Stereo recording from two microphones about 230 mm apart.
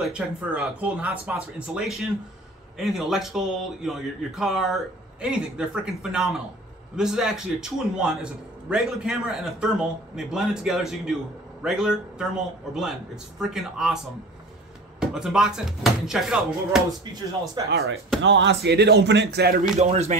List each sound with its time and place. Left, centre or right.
0.0 s a man's voice: centre
15.0 s a man's voice: centre
17.6 s speech: centre
18.2 s speech: right
19.8 s speech: right